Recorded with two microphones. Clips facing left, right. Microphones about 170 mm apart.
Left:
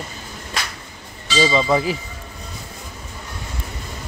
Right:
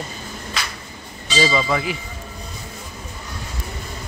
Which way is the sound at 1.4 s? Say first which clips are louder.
Left 3 dB; 20° left (ahead or behind).